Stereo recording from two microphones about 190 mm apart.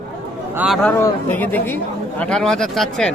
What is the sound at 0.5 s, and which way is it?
Speech, 5° right (ahead or behind).